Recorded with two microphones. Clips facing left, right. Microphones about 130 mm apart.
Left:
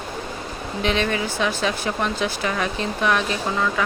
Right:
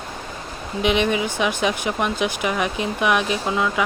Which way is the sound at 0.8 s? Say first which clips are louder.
Right 3 dB; 15° right (ahead or behind).